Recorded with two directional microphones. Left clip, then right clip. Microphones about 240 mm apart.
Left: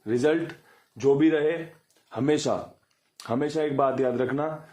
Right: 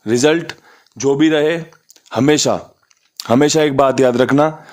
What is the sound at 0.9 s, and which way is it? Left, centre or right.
A man's voice, right.